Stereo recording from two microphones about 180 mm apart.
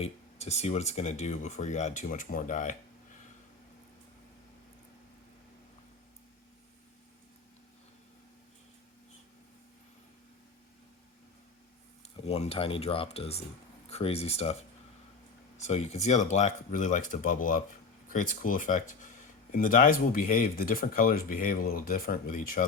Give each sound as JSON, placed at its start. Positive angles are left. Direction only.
{"t": 0.0, "sound": "speech", "side_deg": 40}
{"t": 12.2, "sound": "speech", "side_deg": 35}
{"t": 15.5, "sound": "speech", "side_deg": 40}